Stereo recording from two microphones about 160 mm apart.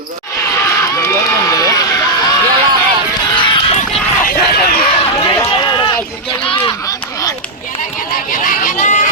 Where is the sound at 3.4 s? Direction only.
30° left (ahead or behind).